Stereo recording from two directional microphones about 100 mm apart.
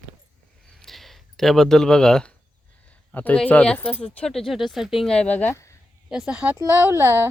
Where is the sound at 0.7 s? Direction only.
Centre (ahead or behind).